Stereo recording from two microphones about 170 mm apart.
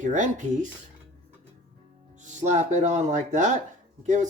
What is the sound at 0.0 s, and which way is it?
Speech, 45° right (ahead or behind).